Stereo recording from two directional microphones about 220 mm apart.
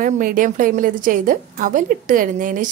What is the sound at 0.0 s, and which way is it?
A woman's voice, 35° right (ahead or behind).